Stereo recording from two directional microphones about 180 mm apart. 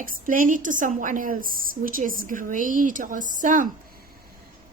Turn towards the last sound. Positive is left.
turn(degrees=-45)  # may be behind; listen again after turning